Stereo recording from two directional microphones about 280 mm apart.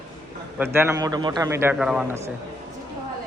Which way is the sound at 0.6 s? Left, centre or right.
Centre.